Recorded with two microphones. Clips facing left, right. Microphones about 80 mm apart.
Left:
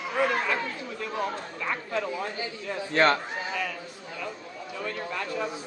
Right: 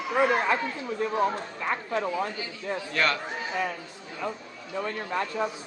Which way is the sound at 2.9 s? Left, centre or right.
Left.